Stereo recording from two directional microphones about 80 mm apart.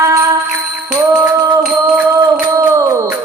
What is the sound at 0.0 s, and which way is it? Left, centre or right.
Music, right.